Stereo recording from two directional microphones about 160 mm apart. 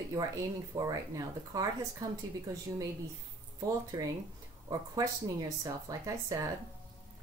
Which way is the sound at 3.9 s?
20° right (ahead or behind).